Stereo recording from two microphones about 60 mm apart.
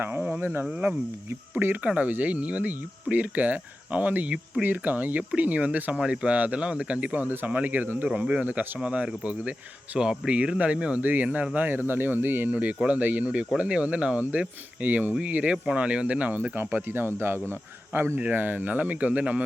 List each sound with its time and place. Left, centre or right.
0.0 s speech: right
1.5 s speech: right
16.3 s speech: right